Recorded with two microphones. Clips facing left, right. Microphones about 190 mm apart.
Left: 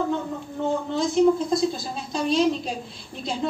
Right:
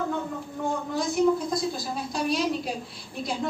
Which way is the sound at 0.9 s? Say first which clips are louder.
Left 4 dB; 25° left (ahead or behind).